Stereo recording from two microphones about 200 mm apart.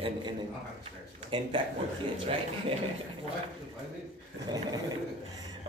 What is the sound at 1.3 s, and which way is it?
Speech, 25° right (ahead or behind).